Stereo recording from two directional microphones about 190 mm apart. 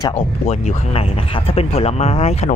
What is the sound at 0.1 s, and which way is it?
Speech, 35° left (ahead or behind).